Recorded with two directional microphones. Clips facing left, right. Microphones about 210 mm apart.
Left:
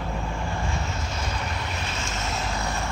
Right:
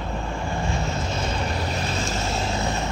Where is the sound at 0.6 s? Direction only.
30° right (ahead or behind).